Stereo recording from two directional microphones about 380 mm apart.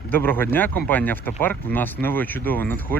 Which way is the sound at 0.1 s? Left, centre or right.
Centre.